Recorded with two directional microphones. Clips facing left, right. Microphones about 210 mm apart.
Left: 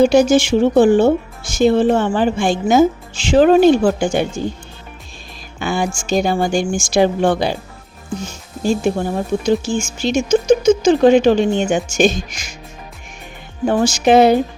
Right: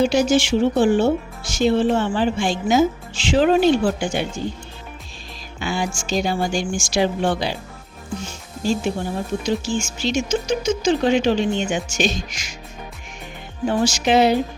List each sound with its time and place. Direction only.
0.0 s speech: 50° left (ahead or behind)
5.5 s speech: 50° left (ahead or behind)
13.7 s speech: 50° left (ahead or behind)